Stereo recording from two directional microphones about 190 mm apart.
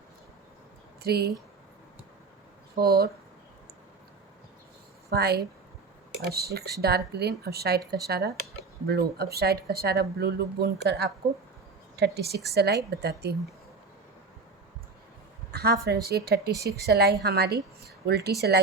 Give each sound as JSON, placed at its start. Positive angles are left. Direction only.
{"t": 1.0, "sound": "speech", "side_deg": -55}
{"t": 2.8, "sound": "speech", "side_deg": -55}
{"t": 5.1, "sound": "speech", "side_deg": -55}
{"t": 15.5, "sound": "speech", "side_deg": -55}